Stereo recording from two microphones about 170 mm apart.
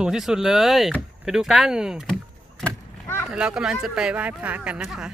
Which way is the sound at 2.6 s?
15° left (ahead or behind).